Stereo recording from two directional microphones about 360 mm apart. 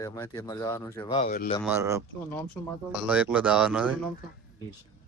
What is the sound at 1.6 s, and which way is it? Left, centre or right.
Speech, centre.